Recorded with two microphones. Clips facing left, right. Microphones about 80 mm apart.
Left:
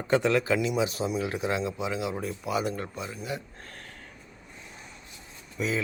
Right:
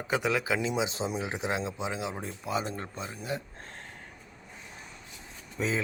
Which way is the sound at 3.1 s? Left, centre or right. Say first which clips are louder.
Even; right.